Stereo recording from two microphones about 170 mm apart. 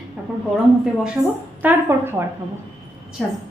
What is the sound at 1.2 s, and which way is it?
A woman's voice, 20° right (ahead or behind).